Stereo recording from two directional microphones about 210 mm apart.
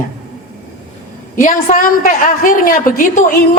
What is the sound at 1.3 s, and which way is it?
A woman's voice, 40° left (ahead or behind).